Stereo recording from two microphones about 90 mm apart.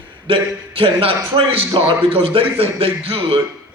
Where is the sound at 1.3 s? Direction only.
70° right (ahead or behind).